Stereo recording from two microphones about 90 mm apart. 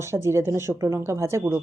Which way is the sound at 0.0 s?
30° right (ahead or behind).